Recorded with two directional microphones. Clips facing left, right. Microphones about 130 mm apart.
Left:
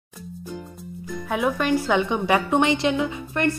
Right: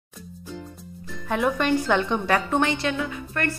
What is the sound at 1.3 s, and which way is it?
A woman's voice, 5° left (ahead or behind).